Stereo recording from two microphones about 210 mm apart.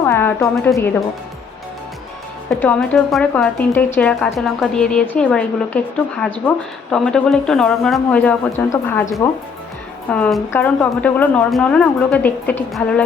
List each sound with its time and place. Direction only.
0.0 s speech: 10° left (ahead or behind)
2.5 s a woman's voice: 5° left (ahead or behind)